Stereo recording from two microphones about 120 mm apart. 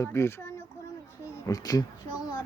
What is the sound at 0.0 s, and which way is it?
Speech, 20° left (ahead or behind).